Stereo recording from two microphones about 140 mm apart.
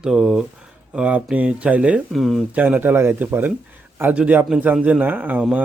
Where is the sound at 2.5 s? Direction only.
10° right (ahead or behind).